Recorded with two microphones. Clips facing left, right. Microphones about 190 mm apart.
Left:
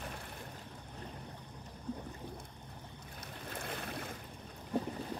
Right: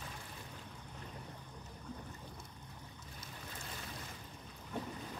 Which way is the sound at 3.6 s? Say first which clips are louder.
Left 8 dB; 60° left (ahead or behind).